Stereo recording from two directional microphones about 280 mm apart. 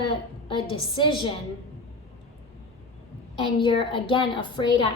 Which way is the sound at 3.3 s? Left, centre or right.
Centre.